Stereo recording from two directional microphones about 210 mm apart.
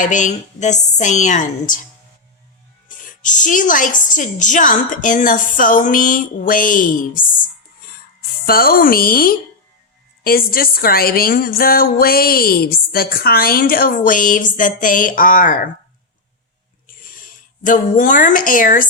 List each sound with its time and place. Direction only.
0.0 s a woman's voice: 35° left (ahead or behind)
3.0 s a woman's voice: 40° left (ahead or behind)
8.4 s a woman's voice: 45° left (ahead or behind)
16.8 s a sound: 40° left (ahead or behind)